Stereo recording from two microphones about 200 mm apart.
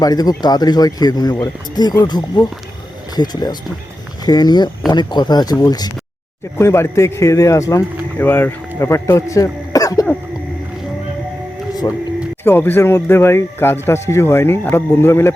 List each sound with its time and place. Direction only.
0.0 s speech: 20° left (ahead or behind)
11.8 s speech: 20° left (ahead or behind)